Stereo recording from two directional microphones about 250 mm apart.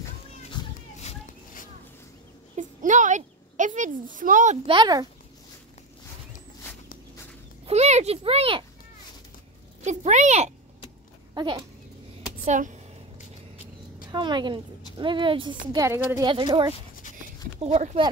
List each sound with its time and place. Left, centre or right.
0.9 s children playing: left
2.5 s a woman's voice: right
7.6 s speech: right
9.8 s speech: right
11.3 s a woman's voice: centre
12.4 s speech: right
14.0 s a woman's voice: centre